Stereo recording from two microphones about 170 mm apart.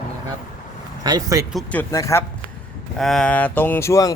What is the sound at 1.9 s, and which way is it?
Speech, 20° left (ahead or behind).